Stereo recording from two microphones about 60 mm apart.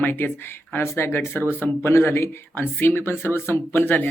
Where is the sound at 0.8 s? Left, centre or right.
Left.